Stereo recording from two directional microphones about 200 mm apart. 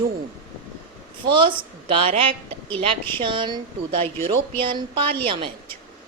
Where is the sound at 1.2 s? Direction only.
25° right (ahead or behind).